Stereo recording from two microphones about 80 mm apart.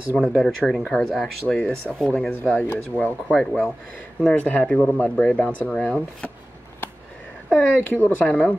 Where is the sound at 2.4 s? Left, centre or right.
Centre.